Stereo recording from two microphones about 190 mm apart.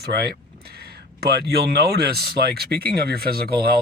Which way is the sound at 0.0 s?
55° right (ahead or behind).